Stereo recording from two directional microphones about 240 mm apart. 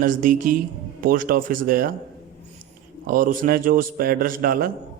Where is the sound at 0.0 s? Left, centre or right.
Right.